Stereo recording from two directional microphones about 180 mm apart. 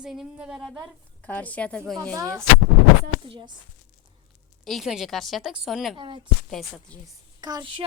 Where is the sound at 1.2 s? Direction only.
10° left (ahead or behind).